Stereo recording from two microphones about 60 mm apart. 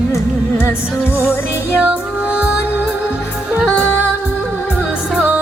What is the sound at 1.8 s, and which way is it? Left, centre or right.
Music, centre.